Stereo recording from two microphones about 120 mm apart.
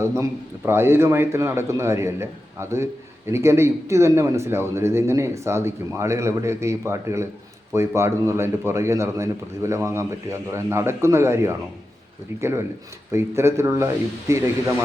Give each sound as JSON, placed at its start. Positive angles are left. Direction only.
{"t": 0.0, "sound": "a man's voice", "side_deg": -20}